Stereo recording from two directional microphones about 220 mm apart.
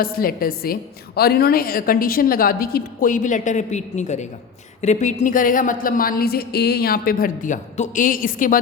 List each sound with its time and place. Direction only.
0.0 s a woman's voice: 40° left (ahead or behind)